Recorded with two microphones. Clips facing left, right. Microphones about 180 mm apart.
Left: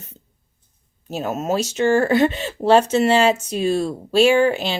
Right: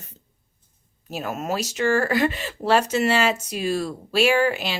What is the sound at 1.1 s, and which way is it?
Speech, 25° left (ahead or behind).